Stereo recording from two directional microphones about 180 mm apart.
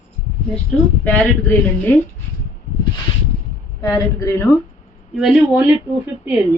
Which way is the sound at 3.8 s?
20° left (ahead or behind).